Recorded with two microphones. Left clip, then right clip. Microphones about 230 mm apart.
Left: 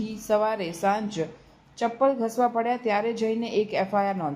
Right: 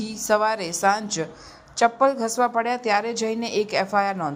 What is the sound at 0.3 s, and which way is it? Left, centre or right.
A woman's voice, centre.